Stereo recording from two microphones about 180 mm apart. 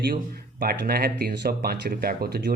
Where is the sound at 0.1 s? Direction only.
55° right (ahead or behind).